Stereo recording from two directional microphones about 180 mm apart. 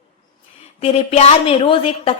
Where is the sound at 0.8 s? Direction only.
35° left (ahead or behind).